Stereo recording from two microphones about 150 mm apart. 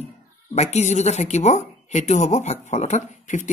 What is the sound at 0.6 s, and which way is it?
Speech, 45° left (ahead or behind).